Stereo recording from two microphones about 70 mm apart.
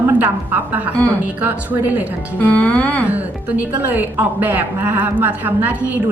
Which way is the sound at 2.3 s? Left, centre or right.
Centre.